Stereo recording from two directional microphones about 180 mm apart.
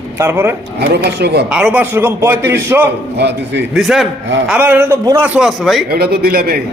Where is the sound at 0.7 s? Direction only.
65° right (ahead or behind).